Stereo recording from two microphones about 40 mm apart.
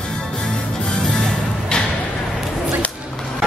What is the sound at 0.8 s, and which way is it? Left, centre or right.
Music, centre.